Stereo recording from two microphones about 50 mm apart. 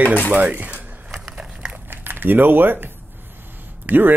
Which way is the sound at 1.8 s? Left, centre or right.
Right.